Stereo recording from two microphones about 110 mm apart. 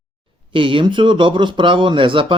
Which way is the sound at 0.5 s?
50° right (ahead or behind).